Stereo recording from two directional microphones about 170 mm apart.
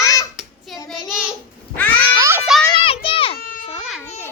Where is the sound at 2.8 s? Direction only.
30° left (ahead or behind).